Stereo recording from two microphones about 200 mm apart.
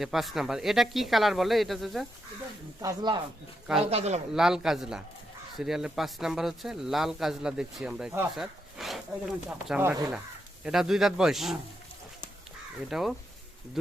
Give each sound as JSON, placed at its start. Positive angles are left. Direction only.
{"t": 0.0, "sound": "speech", "side_deg": 0}
{"t": 2.8, "sound": "speech", "side_deg": -20}
{"t": 3.8, "sound": "speech", "side_deg": -30}
{"t": 4.4, "sound": "speech", "side_deg": 0}
{"t": 10.6, "sound": "speech", "side_deg": -5}
{"t": 12.9, "sound": "speech", "side_deg": 0}